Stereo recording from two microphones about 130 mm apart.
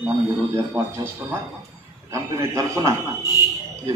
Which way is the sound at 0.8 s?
15° right (ahead or behind).